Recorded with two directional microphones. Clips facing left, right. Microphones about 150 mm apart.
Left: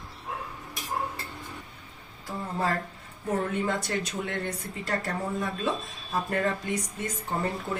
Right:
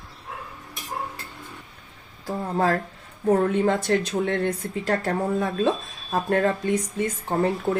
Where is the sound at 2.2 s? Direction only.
65° right (ahead or behind).